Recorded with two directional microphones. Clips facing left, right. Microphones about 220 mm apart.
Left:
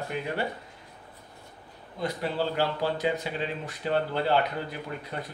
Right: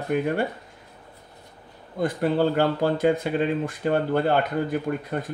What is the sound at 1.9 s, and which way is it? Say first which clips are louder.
Speech: right 7 dB; 50° right (ahead or behind).